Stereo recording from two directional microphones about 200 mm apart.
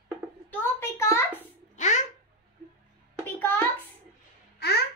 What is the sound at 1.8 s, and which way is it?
Babbling, 35° left (ahead or behind).